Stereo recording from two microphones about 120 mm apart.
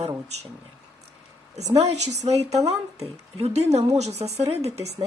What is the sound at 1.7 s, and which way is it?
A woman's voice, 65° right (ahead or behind).